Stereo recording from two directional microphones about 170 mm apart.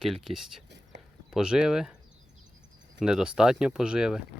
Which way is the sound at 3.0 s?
5° right (ahead or behind).